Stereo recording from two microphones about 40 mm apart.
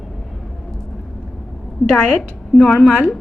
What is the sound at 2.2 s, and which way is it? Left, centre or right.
Speech, centre.